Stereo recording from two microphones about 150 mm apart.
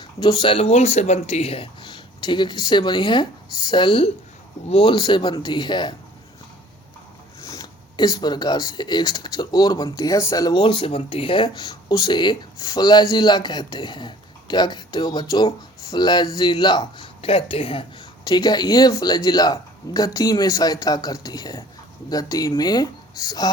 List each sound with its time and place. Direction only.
0.0 s speech: 30° left (ahead or behind)
7.4 s speech: 25° left (ahead or behind)
18.3 s speech: 25° left (ahead or behind)